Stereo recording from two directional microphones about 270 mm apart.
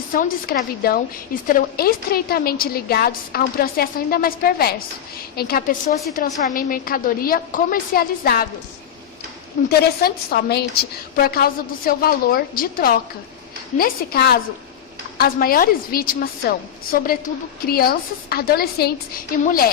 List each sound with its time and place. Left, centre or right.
0.1 s a woman's voice: left
9.6 s a woman's voice: left